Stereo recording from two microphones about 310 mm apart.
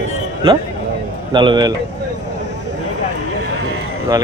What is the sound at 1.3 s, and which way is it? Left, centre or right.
Speech, centre.